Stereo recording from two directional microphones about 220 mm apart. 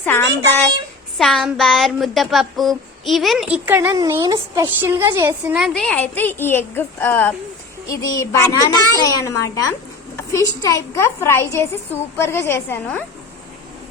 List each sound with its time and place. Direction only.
0.0 s a woman's voice: 10° left (ahead or behind)